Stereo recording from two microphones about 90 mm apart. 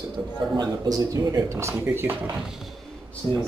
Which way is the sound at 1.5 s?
35° right (ahead or behind).